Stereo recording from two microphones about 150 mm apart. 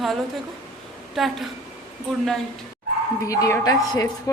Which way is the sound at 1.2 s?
Centre (ahead or behind).